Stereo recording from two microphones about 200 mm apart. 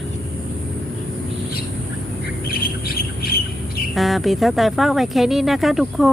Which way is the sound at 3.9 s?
Centre (ahead or behind).